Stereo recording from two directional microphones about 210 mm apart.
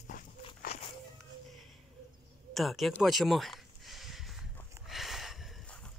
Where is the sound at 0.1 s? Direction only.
40° left (ahead or behind).